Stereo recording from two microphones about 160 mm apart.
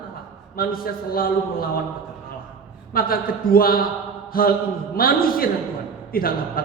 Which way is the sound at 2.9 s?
65° left (ahead or behind).